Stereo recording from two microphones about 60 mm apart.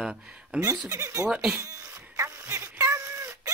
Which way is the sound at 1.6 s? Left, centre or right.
Right.